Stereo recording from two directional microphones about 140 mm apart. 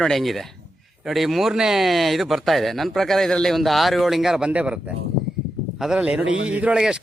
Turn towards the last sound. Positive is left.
turn(degrees=-5)  # may be behind; listen again after turning